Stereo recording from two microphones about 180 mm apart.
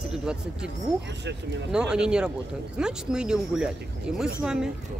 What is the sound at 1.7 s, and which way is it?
Speech, 5° right (ahead or behind).